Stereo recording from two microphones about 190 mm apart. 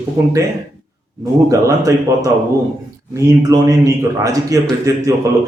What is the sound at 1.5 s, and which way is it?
Speech, 15° right (ahead or behind).